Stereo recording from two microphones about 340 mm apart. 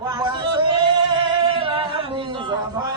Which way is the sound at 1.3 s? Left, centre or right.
Centre.